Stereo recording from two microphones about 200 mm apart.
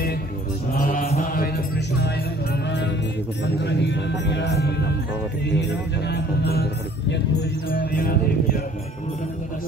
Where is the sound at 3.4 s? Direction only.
60° left (ahead or behind).